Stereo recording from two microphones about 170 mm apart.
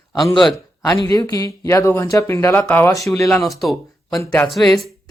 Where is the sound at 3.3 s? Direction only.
Centre (ahead or behind).